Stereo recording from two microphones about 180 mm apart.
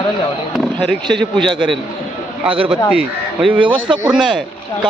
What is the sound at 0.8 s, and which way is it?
A man's voice, 5° left (ahead or behind).